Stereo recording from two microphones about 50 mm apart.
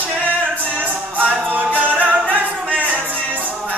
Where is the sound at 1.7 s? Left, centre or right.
Right.